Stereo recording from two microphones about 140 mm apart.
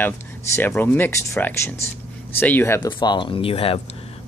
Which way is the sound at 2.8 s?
30° left (ahead or behind).